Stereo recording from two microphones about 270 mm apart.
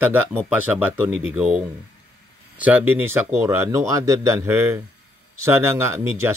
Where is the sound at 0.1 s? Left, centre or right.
Centre.